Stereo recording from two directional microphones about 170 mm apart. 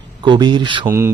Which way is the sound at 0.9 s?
15° right (ahead or behind).